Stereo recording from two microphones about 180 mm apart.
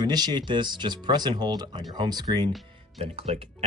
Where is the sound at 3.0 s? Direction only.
35° right (ahead or behind).